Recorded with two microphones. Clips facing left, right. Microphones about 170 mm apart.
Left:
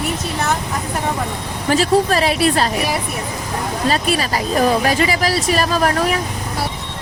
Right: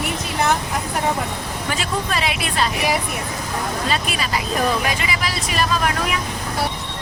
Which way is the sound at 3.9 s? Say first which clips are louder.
Left 8 dB; 40° left (ahead or behind).